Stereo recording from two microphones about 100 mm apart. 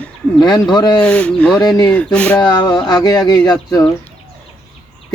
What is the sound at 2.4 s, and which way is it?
Speech, 45° left (ahead or behind).